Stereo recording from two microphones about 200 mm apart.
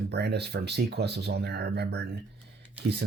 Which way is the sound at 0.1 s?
55° right (ahead or behind).